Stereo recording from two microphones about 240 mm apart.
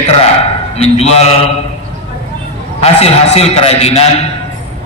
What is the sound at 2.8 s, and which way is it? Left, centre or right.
A man's voice, left.